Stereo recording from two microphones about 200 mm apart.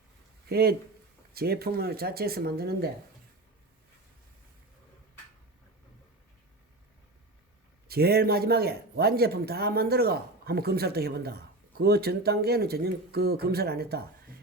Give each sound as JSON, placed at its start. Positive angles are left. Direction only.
{"t": 0.4, "sound": "a man's voice", "side_deg": -50}
{"t": 7.9, "sound": "a man's voice", "side_deg": -50}